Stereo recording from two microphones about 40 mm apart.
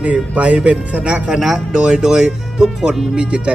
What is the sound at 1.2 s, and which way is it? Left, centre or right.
Speech, centre.